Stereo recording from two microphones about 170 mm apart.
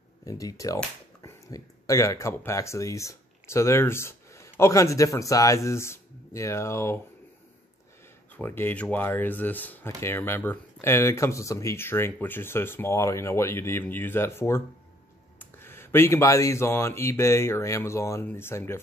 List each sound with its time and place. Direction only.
0.2 s speech: 20° left (ahead or behind)
8.4 s speech: 10° left (ahead or behind)